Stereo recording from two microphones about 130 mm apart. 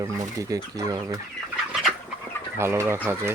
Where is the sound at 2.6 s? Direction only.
20° right (ahead or behind).